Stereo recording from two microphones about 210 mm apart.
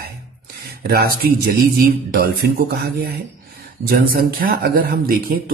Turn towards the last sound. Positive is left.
turn(degrees=-45)  # may be behind; listen again after turning